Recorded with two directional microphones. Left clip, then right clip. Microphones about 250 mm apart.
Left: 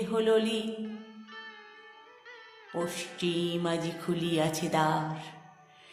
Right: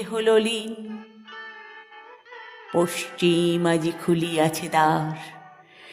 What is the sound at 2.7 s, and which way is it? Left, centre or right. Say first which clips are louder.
Music: right 11 dB; right.